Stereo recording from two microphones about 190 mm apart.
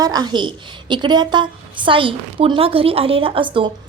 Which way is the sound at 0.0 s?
20° right (ahead or behind).